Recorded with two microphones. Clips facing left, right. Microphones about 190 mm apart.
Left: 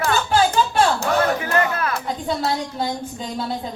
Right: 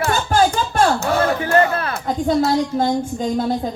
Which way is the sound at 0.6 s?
45° right (ahead or behind).